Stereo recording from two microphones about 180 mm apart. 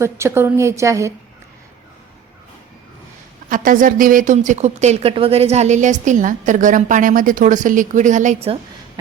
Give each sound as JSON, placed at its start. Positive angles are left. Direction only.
{"t": 0.0, "sound": "a woman's voice", "side_deg": -15}
{"t": 3.5, "sound": "a woman's voice", "side_deg": -50}